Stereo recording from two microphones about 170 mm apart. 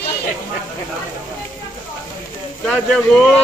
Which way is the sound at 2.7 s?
5° left (ahead or behind).